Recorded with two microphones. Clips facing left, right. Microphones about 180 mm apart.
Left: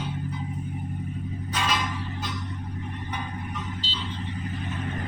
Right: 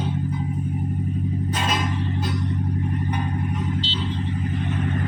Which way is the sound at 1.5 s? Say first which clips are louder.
Even; 50° right (ahead or behind).